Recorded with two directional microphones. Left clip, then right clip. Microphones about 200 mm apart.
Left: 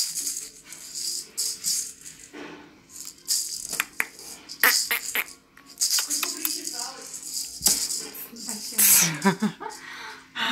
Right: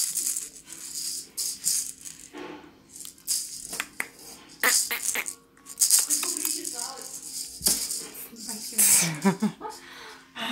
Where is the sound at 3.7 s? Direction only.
Centre (ahead or behind).